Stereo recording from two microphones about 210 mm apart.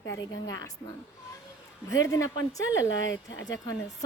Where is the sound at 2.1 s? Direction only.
15° left (ahead or behind).